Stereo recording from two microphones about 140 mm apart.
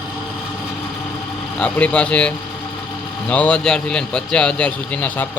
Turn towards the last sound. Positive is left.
turn(degrees=10)  # may be behind; listen again after turning